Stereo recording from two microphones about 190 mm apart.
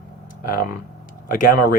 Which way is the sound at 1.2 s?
45° left (ahead or behind).